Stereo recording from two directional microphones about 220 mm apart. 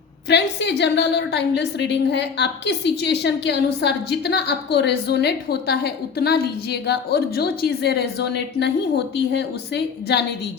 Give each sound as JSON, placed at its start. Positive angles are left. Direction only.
{"t": 0.3, "sound": "a woman's voice", "side_deg": 50}